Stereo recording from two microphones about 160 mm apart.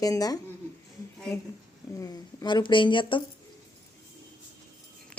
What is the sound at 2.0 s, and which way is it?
Speech, 25° left (ahead or behind).